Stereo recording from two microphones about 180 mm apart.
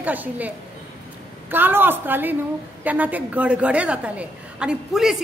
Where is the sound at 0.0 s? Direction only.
10° right (ahead or behind).